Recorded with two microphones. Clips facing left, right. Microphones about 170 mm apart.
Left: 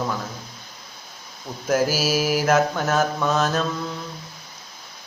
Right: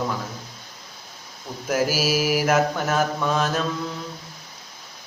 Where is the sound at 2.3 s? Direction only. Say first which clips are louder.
Left 2 dB; 10° right (ahead or behind).